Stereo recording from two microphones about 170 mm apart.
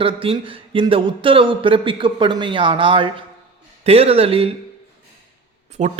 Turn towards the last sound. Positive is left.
turn(degrees=-40)  # may be behind; listen again after turning